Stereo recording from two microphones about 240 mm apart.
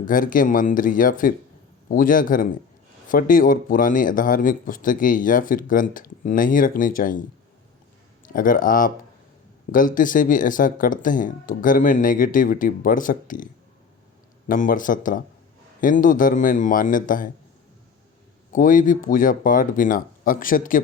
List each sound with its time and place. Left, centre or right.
0.0 s speech: left
8.3 s speech: left
18.5 s speech: left